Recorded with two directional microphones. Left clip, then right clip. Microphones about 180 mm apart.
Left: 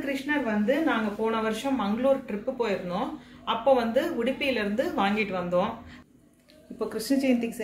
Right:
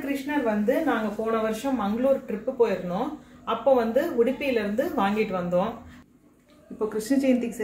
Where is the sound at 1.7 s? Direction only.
40° right (ahead or behind).